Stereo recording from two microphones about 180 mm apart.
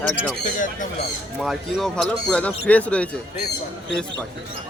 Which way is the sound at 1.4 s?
Centre (ahead or behind).